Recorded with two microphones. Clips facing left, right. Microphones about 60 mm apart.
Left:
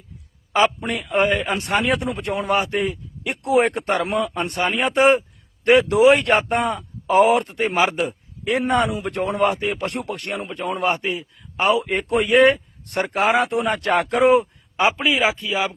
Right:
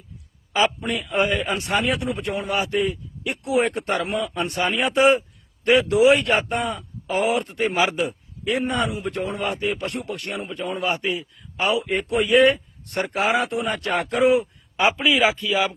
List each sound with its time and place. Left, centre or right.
0.5 s a man's voice: left
5.7 s a man's voice: left
7.8 s a man's voice: left
11.0 s speech: left
11.5 s a man's voice: left
14.8 s speech: left